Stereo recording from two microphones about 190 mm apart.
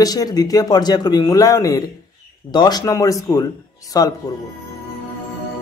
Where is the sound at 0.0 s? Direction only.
20° left (ahead or behind).